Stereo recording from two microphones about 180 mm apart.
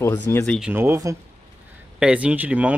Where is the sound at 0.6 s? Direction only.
10° right (ahead or behind).